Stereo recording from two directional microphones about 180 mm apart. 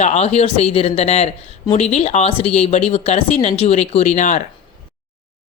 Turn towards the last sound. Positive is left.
turn(degrees=45)  # may be behind; listen again after turning